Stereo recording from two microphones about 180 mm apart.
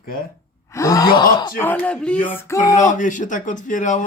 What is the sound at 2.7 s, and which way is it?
Speech, 45° left (ahead or behind).